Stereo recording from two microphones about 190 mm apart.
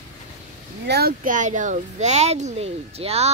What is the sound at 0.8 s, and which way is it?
A child's voice, 55° right (ahead or behind).